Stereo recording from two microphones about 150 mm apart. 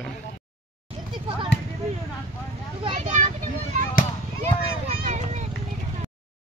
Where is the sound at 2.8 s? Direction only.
40° right (ahead or behind).